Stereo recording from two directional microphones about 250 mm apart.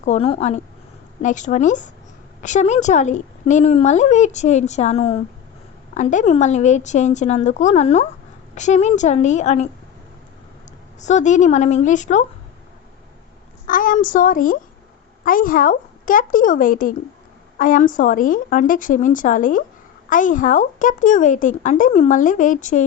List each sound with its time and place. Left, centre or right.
0.0 s a woman's voice: left
11.0 s a woman's voice: left
13.7 s a woman's voice: left